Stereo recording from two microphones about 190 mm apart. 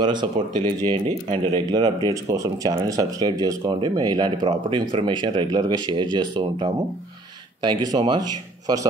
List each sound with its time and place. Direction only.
0.0 s speech: 25° right (ahead or behind)
0.6 s speech: 40° right (ahead or behind)
1.7 s speech: 20° right (ahead or behind)